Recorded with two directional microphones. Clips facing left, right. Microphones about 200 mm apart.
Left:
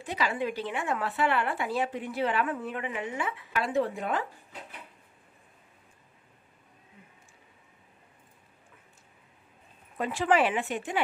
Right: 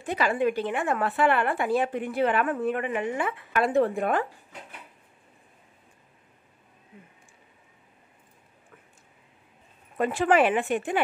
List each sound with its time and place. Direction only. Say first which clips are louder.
0.0 s a woman's voice: right 6 dB; 50° right (ahead or behind)
9.9 s a woman's voice: right 4 dB; 50° right (ahead or behind)